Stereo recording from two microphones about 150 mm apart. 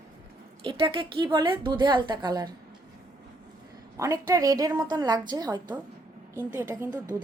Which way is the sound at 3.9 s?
20° right (ahead or behind).